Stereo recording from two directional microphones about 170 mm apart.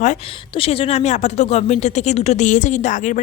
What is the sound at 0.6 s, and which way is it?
Speech, 35° left (ahead or behind).